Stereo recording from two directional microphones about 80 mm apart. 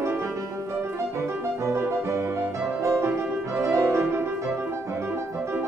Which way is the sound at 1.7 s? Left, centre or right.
Right.